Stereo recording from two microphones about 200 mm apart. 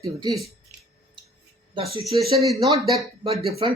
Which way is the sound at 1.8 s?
25° right (ahead or behind).